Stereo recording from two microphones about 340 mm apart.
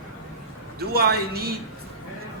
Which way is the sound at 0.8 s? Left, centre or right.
Right.